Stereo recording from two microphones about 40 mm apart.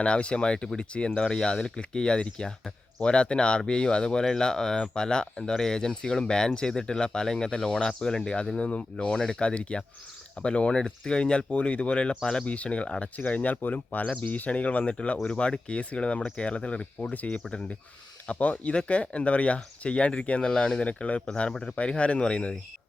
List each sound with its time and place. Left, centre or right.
0.0 s speech: left
15.3 s speech: left
21.5 s speech: centre
21.8 s speech: left